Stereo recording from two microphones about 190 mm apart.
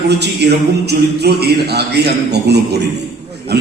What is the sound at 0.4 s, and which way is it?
A man's voice, 60° right (ahead or behind).